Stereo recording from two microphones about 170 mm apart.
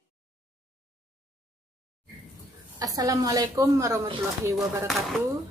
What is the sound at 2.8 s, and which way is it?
A woman's voice, 20° right (ahead or behind).